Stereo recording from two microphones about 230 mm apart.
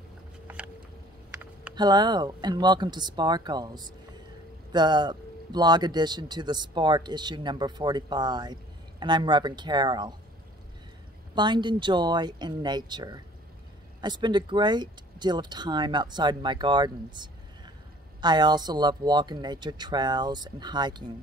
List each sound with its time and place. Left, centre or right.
1.8 s speech: centre
11.3 s speech: centre